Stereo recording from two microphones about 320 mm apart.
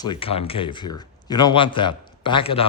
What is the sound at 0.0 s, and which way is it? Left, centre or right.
Speech, centre.